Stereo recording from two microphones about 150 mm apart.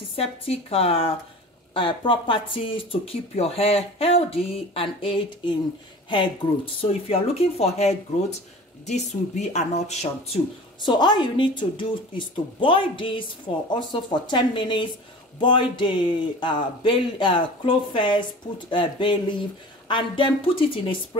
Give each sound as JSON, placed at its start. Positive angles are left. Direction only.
{"t": 0.1, "sound": "speech", "side_deg": 40}
{"t": 10.9, "sound": "speech", "side_deg": 30}